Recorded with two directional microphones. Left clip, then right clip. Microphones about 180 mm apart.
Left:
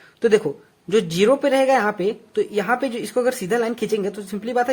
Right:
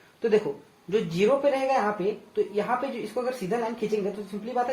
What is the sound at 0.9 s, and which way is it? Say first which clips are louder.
Speech: left 6 dB; 55° left (ahead or behind).